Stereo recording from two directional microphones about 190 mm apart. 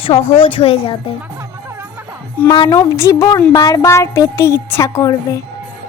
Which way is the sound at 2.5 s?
20° left (ahead or behind).